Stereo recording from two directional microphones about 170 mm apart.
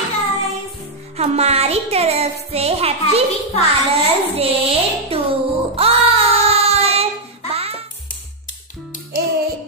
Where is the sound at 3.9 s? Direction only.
35° right (ahead or behind).